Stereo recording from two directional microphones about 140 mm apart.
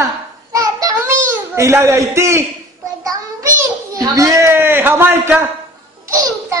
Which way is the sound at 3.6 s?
20° right (ahead or behind).